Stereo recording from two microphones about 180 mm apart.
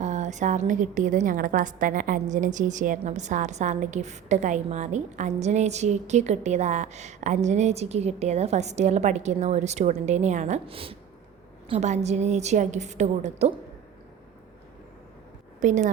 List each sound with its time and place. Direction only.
0.0 s a woman's voice: 40° right (ahead or behind)
15.6 s a woman's voice: 40° right (ahead or behind)